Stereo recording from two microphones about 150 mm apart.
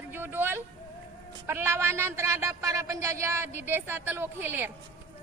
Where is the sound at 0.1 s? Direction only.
15° right (ahead or behind).